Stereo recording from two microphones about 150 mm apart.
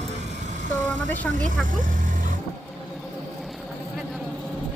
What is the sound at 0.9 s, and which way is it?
Speech, 10° left (ahead or behind).